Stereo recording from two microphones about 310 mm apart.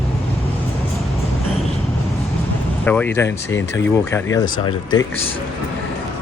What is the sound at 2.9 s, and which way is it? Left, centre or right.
Speech, centre.